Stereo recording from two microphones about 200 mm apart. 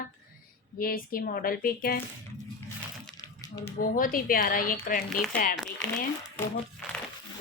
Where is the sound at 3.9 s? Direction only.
45° left (ahead or behind).